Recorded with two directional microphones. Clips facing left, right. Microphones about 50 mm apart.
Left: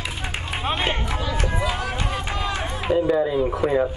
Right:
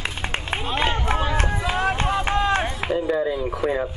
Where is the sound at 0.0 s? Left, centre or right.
Right.